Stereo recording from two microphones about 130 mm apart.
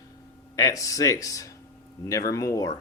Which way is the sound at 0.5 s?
25° left (ahead or behind).